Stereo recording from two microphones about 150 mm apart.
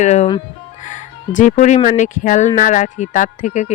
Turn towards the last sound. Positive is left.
turn(degrees=55)  # may be behind; listen again after turning